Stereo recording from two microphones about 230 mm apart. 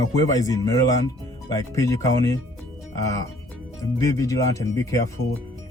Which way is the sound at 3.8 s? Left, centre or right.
Centre.